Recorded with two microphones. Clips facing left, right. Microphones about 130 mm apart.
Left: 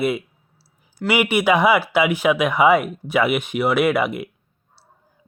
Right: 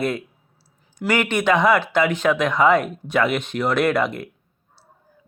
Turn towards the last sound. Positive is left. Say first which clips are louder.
# left 1 dB
turn(degrees=5)  # may be behind; listen again after turning